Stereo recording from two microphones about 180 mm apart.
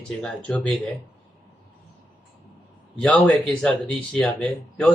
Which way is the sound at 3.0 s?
5° left (ahead or behind).